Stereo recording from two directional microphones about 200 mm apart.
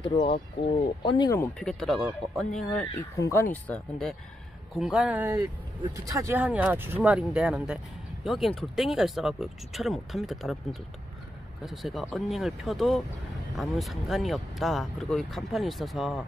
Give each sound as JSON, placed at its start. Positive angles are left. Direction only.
{"t": 0.0, "sound": "speech", "side_deg": 25}